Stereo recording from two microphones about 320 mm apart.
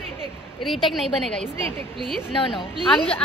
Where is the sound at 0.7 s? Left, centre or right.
Centre.